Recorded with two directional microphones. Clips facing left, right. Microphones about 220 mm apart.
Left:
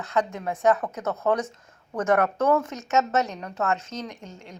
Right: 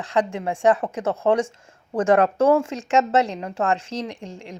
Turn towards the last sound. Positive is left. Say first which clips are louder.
# right 4 dB
turn(degrees=-30)  # may be behind; listen again after turning